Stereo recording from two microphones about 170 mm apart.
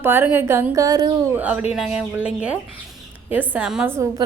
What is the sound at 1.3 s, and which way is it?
A woman's voice, 10° right (ahead or behind).